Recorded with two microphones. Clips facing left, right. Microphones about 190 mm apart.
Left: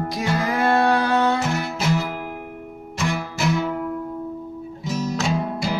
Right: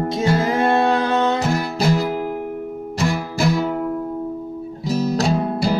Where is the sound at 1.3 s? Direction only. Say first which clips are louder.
Right 4 dB; 35° right (ahead or behind).